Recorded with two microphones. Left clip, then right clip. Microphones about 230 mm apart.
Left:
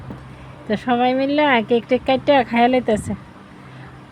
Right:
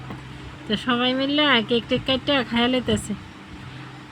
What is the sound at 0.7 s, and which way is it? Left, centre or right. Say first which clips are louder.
Speech: left 4 dB; centre.